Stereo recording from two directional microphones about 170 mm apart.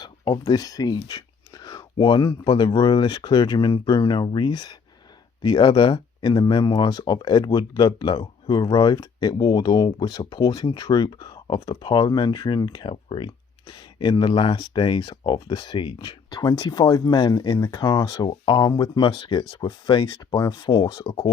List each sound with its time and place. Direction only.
0.0 s speech: 20° left (ahead or behind)